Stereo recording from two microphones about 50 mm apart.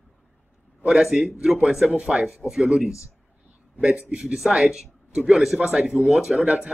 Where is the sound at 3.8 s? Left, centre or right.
Centre.